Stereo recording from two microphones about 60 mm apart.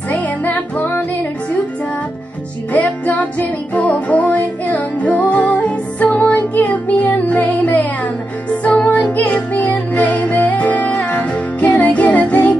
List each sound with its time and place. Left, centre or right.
0.1 s music: left
2.7 s music: left